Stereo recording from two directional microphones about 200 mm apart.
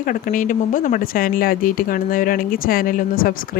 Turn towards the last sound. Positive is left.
turn(degrees=45)  # may be behind; listen again after turning